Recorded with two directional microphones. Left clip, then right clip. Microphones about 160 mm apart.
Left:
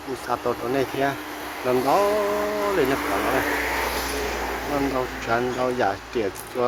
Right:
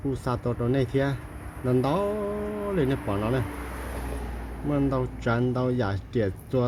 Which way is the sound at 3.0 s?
90° right.